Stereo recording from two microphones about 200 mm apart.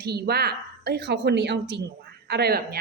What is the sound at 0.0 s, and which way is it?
A woman's voice, 55° right (ahead or behind).